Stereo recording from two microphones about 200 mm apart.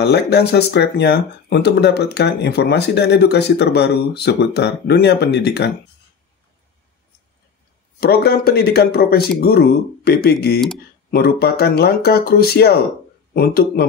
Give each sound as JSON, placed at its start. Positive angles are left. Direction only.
{"t": 0.0, "sound": "speech", "side_deg": 55}
{"t": 8.0, "sound": "speech", "side_deg": 50}